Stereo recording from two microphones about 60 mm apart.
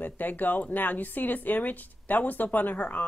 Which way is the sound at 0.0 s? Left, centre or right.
Left.